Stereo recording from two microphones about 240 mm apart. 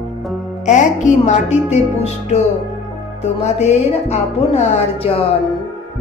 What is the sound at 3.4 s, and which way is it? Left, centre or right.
Speech, left.